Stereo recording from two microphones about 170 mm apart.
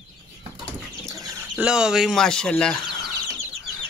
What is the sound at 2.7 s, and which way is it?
Chicken, 25° left (ahead or behind).